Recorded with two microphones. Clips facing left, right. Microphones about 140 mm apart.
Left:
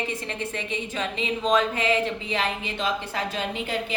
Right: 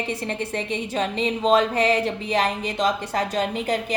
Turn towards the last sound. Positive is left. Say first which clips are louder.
# right 4 dB
turn(degrees=-40)  # may be behind; listen again after turning